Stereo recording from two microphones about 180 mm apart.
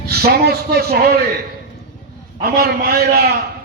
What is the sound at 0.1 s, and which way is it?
A man's voice, 60° right (ahead or behind).